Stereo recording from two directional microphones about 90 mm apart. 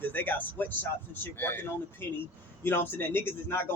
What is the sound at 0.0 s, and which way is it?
Speech, 20° left (ahead or behind).